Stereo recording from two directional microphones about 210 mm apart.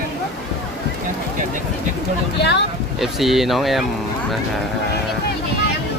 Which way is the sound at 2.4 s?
55° left (ahead or behind).